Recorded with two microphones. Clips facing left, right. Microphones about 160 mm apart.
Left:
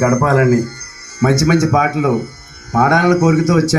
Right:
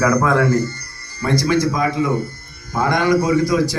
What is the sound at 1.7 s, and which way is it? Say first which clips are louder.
Speech: left 5 dB; 70° left (ahead or behind).